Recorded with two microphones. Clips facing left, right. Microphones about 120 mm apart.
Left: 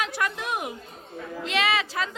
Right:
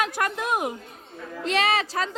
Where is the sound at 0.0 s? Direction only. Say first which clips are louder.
Right 3 dB; 45° right (ahead or behind).